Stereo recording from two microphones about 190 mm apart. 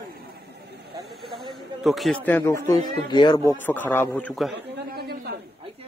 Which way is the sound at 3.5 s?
10° left (ahead or behind).